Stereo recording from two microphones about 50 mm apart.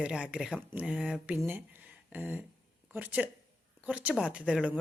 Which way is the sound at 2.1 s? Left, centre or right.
Right.